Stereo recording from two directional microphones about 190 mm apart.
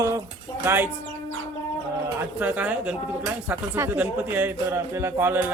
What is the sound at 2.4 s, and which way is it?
Speech, 10° right (ahead or behind).